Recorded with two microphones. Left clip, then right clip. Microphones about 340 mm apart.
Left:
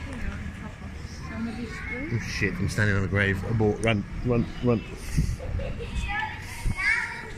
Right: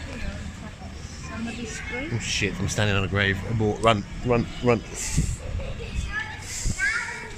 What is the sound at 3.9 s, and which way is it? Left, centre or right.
Speech, right.